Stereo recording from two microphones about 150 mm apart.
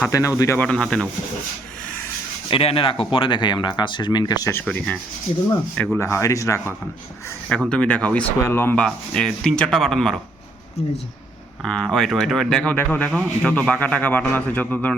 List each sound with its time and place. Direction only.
0.0 s speech: 20° left (ahead or behind)
0.6 s speech: 5° left (ahead or behind)
2.5 s speech: 40° left (ahead or behind); by 4.6 s 20° left (ahead or behind)
4.6 s speech: 10° left (ahead or behind)
6.1 s speech: 20° left (ahead or behind)
7.7 s speech: 5° left (ahead or behind)
11.6 s speech: 5° left (ahead or behind)